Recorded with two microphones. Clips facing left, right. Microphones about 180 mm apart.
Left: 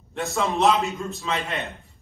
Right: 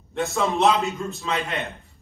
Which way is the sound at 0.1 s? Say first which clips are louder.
Right 2 dB; centre (ahead or behind).